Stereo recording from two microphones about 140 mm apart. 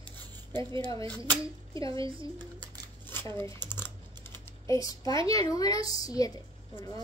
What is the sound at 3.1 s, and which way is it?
Speech, 15° left (ahead or behind).